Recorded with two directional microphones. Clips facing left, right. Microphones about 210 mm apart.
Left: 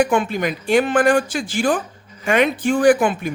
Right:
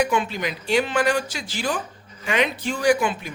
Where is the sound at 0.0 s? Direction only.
50° left (ahead or behind).